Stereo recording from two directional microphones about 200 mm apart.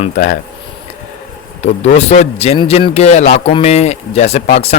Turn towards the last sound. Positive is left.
turn(degrees=30)  # may be behind; listen again after turning